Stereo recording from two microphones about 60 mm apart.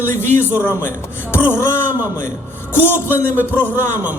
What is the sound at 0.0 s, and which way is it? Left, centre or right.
Speech, left.